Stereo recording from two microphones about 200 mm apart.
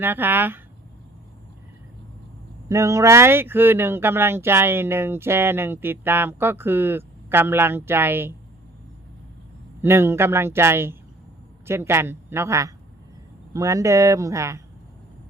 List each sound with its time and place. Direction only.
0.0 s speech: 10° right (ahead or behind)
2.6 s speech: 15° right (ahead or behind)
9.8 s speech: 10° right (ahead or behind)